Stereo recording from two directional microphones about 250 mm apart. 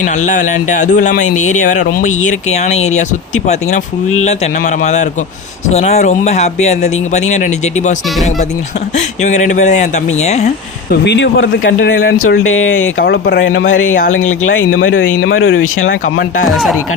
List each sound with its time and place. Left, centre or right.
0.0 s speech: left
9.2 s speech: left
11.0 s speech: left
16.5 s speech: centre